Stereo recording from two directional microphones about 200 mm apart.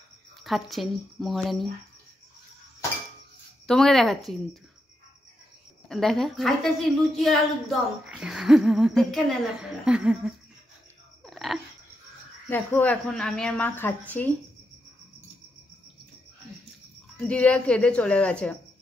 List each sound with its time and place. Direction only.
0.4 s a woman's voice: centre (ahead or behind)
3.6 s a woman's voice: centre (ahead or behind)
5.9 s a woman's voice: centre (ahead or behind)
11.2 s a sound: centre (ahead or behind)
12.4 s a woman's voice: 10° left (ahead or behind)
17.2 s a woman's voice: 5° left (ahead or behind)